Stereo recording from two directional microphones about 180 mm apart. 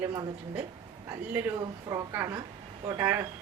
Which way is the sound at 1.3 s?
10° right (ahead or behind).